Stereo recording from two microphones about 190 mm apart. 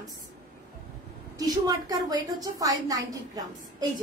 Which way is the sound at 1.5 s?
20° right (ahead or behind).